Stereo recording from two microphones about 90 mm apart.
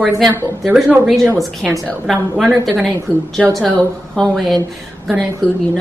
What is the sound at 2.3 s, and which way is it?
Speech, 5° right (ahead or behind).